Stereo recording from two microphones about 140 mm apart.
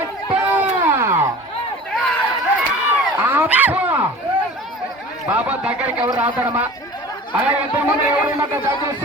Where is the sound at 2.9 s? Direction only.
15° right (ahead or behind).